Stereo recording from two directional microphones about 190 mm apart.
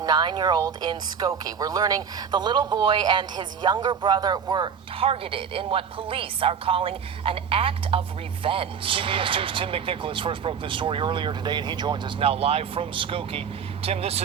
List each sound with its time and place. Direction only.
0.0 s speech: 20° right (ahead or behind)